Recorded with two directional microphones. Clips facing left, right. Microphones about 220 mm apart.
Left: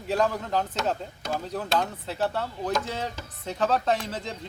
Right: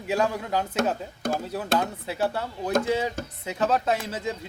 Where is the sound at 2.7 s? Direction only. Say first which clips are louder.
Right 7 dB; 50° right (ahead or behind).